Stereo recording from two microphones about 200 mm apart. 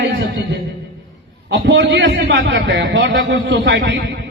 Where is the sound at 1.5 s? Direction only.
65° right (ahead or behind).